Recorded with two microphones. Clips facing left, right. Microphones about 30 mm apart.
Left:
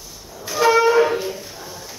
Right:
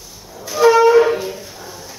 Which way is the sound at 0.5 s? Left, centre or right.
Centre.